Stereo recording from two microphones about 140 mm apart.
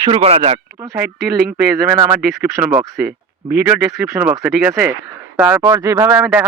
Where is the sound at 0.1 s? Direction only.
45° right (ahead or behind).